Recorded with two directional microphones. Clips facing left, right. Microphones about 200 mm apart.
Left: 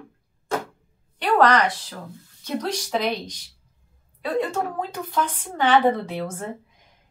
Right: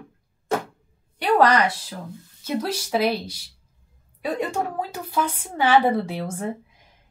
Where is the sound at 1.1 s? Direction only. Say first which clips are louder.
Even; 10° right (ahead or behind).